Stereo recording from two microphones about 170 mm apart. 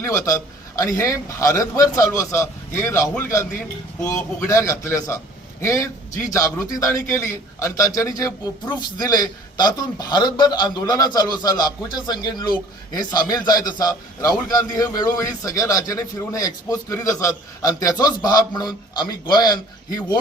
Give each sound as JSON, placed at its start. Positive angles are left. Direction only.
{"t": 0.0, "sound": "a man's voice", "side_deg": 20}